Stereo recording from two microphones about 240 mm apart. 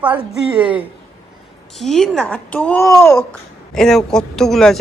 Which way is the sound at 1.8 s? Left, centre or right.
Centre.